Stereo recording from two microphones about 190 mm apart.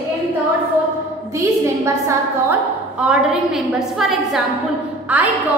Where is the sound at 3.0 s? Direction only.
5° right (ahead or behind).